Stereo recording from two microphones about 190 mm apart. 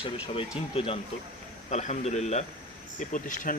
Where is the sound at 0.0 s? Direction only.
30° left (ahead or behind).